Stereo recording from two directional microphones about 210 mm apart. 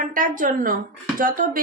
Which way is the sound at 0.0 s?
40° right (ahead or behind).